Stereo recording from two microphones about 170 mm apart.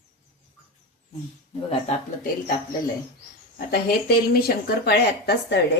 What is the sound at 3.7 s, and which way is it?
Speech, 65° left (ahead or behind).